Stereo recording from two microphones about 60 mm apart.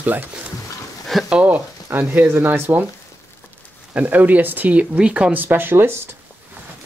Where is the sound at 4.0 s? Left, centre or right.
Right.